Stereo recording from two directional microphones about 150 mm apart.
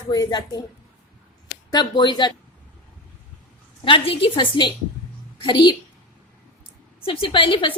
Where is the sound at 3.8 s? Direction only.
35° left (ahead or behind).